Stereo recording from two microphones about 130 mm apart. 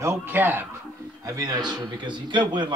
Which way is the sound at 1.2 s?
25° right (ahead or behind).